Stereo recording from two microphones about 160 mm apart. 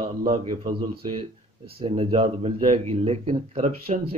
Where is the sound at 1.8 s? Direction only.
35° right (ahead or behind).